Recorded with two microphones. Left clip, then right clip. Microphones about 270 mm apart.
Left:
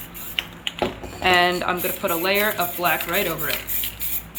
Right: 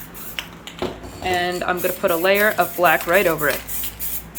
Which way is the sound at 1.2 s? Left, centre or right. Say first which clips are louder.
Left 4 dB; centre.